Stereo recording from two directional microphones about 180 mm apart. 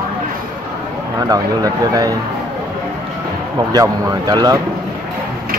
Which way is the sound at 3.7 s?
20° right (ahead or behind).